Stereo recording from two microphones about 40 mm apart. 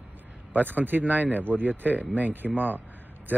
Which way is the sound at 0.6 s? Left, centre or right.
Right.